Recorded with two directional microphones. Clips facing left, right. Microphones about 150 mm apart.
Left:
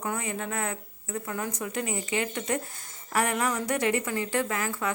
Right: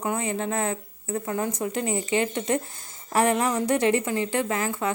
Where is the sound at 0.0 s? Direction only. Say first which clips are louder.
Right 5 dB; 25° right (ahead or behind).